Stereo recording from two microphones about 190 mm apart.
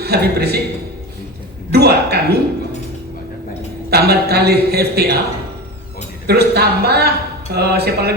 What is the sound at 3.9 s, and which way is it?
Speech, 55° right (ahead or behind).